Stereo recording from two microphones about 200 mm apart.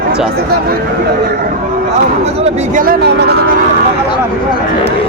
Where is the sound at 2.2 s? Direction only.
35° right (ahead or behind); by 3.3 s 55° right (ahead or behind).